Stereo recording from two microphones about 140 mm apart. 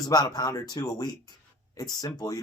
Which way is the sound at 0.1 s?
25° left (ahead or behind).